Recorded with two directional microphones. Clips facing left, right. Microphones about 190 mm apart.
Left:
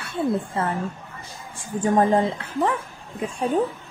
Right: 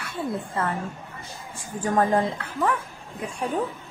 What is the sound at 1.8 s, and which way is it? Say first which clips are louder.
Speech: left 3 dB; 25° left (ahead or behind).